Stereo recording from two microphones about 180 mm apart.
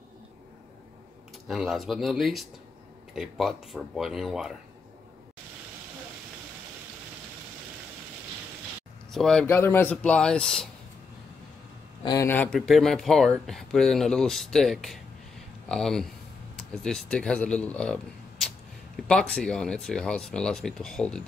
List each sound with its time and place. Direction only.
1.5 s speech: centre (ahead or behind)
9.1 s speech: 5° left (ahead or behind)
12.0 s a man's voice: 20° left (ahead or behind)
12.3 s speech: 5° left (ahead or behind)
19.0 s speech: 5° left (ahead or behind)